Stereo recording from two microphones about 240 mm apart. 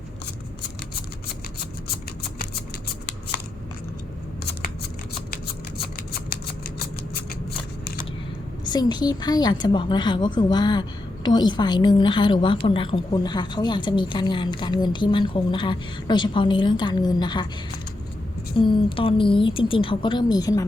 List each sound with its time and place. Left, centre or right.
6.3 s shuffling cards: left
8.6 s a woman's voice: centre
18.5 s a woman's voice: centre